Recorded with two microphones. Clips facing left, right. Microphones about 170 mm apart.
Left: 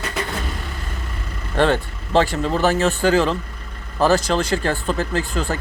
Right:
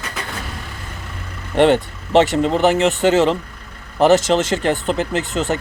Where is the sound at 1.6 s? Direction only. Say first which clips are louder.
Right 5 dB; 20° right (ahead or behind).